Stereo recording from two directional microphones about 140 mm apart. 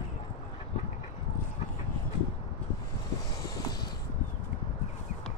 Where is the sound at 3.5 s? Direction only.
30° left (ahead or behind).